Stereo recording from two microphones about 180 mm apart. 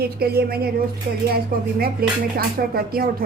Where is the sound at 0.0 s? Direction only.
60° right (ahead or behind).